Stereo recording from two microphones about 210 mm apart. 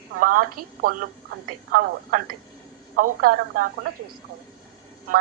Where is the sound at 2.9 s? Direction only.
45° right (ahead or behind).